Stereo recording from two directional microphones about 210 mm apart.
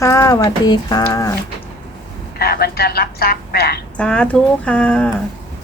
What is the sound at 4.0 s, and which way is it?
Speech, 5° left (ahead or behind).